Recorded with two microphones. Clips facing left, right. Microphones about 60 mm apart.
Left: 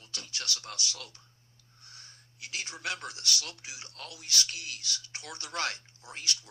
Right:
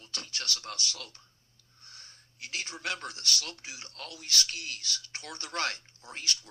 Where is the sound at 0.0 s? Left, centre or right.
Right.